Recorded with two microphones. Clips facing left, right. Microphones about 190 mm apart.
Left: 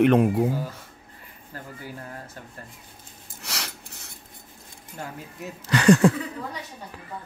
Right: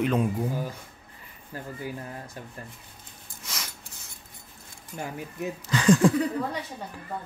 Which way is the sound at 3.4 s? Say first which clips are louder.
Left 4 dB; 70° left (ahead or behind).